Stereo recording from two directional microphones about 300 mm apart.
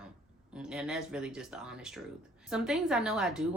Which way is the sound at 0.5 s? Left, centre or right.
Centre.